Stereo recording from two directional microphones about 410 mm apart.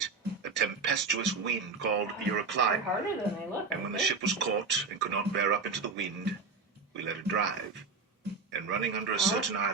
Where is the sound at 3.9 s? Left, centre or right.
Right.